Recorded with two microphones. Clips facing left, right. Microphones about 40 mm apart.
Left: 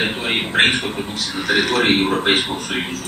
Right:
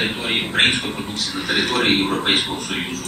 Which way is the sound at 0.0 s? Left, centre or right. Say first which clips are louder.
Left 1 dB; centre.